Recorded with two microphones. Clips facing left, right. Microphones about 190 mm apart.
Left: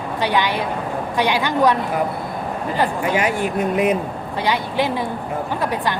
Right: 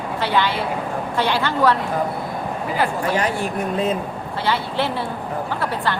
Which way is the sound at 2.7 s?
15° left (ahead or behind).